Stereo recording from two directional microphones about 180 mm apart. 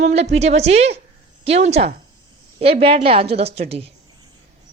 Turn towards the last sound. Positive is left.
turn(degrees=-35)  # may be behind; listen again after turning